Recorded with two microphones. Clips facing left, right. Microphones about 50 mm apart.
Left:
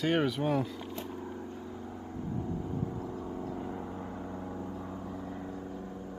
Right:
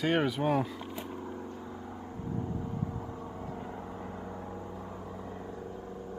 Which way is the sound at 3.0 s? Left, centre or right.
Right.